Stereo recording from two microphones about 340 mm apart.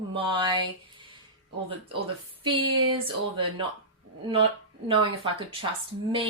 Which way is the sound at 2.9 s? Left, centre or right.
Centre.